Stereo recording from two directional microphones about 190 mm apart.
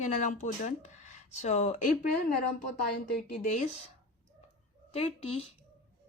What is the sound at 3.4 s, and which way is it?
Speech, 40° left (ahead or behind).